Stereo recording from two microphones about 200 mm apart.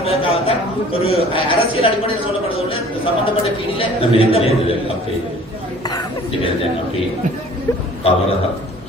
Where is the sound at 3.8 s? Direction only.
30° left (ahead or behind).